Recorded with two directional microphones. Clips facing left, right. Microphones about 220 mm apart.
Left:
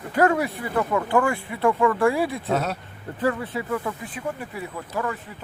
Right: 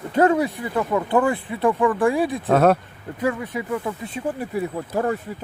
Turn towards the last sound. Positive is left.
turn(degrees=-40)  # may be behind; listen again after turning